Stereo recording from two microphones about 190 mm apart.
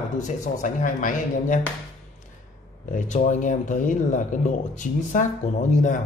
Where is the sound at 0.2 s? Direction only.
40° left (ahead or behind).